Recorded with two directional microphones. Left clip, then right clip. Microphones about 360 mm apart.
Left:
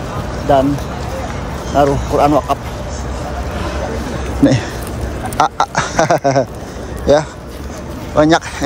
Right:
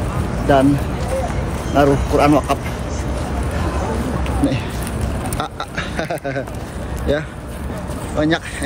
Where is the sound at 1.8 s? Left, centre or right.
Centre.